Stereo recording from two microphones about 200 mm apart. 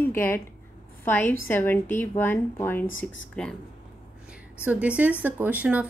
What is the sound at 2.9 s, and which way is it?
Speech, 75° left (ahead or behind).